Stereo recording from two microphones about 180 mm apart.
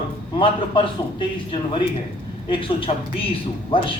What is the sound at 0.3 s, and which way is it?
Speech, 30° left (ahead or behind).